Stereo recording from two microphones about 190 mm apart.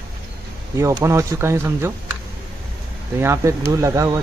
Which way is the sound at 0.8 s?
15° right (ahead or behind).